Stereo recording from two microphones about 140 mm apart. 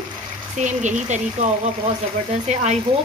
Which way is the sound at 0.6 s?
60° right (ahead or behind).